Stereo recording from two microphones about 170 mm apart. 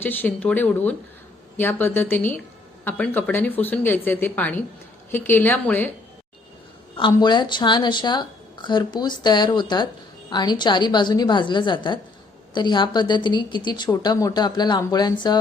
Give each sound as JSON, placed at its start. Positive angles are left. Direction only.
{"t": 0.0, "sound": "speech", "side_deg": 10}
{"t": 7.1, "sound": "speech", "side_deg": 25}